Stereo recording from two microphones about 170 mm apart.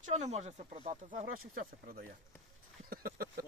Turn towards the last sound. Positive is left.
turn(degrees=-60)  # may be behind; listen again after turning